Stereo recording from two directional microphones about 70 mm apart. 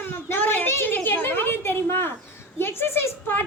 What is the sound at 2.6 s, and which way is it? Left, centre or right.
Speech, left.